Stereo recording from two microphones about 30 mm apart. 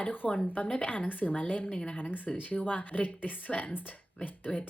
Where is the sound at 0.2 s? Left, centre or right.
Left.